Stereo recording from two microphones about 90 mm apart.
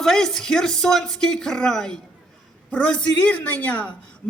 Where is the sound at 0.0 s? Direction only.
5° left (ahead or behind).